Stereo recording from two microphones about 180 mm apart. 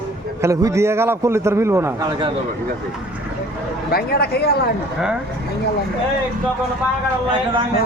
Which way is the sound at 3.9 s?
60° left (ahead or behind).